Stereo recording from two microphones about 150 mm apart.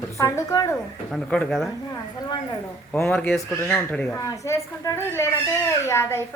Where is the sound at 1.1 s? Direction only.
5° left (ahead or behind).